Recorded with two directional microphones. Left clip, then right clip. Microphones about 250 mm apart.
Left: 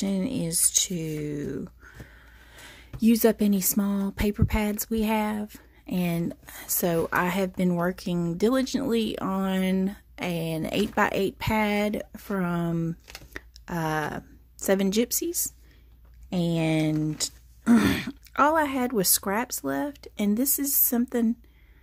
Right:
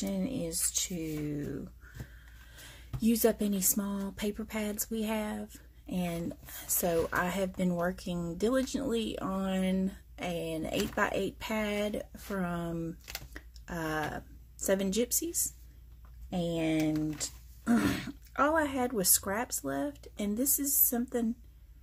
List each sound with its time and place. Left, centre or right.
0.0 s speech: left